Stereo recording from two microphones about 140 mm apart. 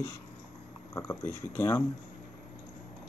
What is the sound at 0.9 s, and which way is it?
Speech, 20° left (ahead or behind).